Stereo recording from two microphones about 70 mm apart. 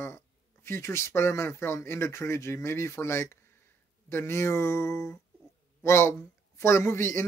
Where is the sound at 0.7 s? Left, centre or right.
Left.